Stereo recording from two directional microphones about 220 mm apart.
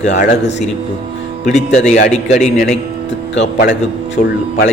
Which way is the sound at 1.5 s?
30° left (ahead or behind).